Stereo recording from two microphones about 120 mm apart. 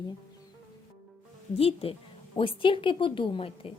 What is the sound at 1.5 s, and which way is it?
A woman's voice, 50° left (ahead or behind).